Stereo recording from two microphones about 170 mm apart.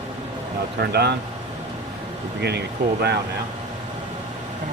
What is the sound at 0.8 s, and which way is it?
Speech, 75° right (ahead or behind).